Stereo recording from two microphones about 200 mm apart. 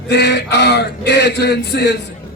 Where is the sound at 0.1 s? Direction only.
55° left (ahead or behind).